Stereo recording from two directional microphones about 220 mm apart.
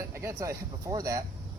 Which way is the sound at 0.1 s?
15° right (ahead or behind).